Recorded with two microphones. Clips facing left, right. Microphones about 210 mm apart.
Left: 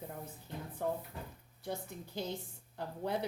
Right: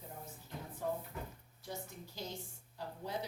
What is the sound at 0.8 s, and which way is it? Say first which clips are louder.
Cupboard open or close: left 3 dB; 60° left (ahead or behind).